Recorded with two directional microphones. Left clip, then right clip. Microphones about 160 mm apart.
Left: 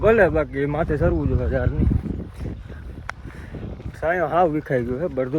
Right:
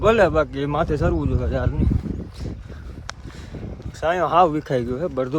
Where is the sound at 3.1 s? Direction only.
15° right (ahead or behind).